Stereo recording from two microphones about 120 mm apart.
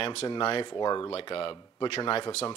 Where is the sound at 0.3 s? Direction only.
50° left (ahead or behind).